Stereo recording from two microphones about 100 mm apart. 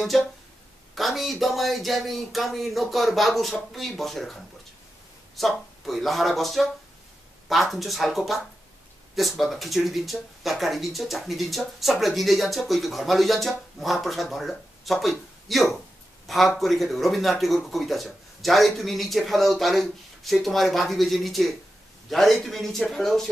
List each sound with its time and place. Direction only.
0.1 s speech: centre (ahead or behind)